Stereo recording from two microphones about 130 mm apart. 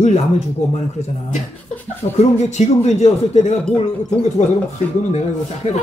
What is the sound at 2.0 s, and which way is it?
Speech, 45° left (ahead or behind).